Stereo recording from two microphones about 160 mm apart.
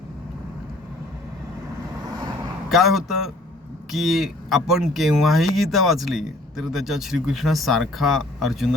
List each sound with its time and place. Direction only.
2.0 s vehicle: 25° right (ahead or behind)
2.6 s speech: centre (ahead or behind)